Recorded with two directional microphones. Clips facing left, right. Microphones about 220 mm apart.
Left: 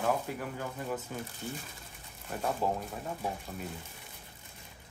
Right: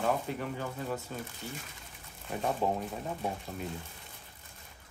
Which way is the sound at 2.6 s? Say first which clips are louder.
Right 1 dB; 5° left (ahead or behind).